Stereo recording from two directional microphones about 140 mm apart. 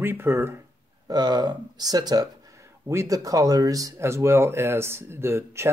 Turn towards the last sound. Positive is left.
turn(degrees=-20)  # may be behind; listen again after turning